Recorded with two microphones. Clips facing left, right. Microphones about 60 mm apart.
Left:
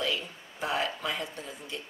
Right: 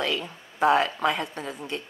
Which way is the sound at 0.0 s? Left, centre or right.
Right.